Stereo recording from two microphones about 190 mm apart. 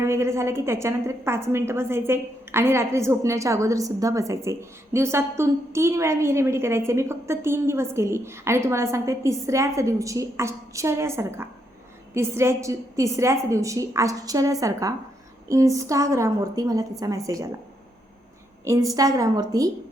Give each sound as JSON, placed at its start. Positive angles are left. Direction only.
{"t": 0.0, "sound": "a woman's voice", "side_deg": -15}
{"t": 18.6, "sound": "a woman's voice", "side_deg": -15}